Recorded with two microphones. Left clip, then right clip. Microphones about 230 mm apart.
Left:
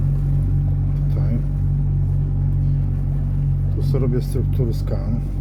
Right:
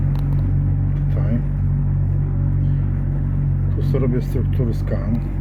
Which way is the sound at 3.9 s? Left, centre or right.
Centre.